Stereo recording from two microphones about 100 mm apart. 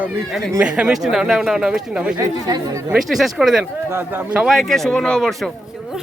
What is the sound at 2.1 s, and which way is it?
Speech, 40° right (ahead or behind).